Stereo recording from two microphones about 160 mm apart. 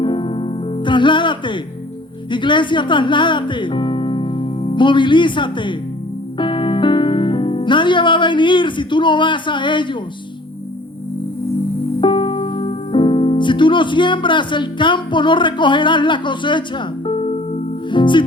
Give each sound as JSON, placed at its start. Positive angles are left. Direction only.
{"t": 0.0, "sound": "music", "side_deg": 30}
{"t": 2.3, "sound": "speech", "side_deg": 30}
{"t": 6.4, "sound": "music", "side_deg": 30}
{"t": 11.9, "sound": "speech", "side_deg": 30}
{"t": 17.8, "sound": "music", "side_deg": 30}